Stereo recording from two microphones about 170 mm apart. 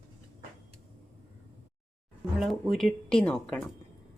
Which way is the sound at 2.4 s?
Centre (ahead or behind).